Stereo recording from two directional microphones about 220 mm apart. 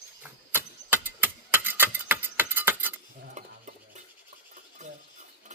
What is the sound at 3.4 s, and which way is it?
Stir, 30° right (ahead or behind).